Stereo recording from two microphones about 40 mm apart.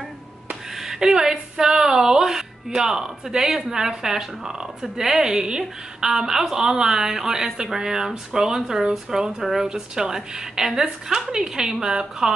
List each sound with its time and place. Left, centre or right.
0.7 s a woman's voice: centre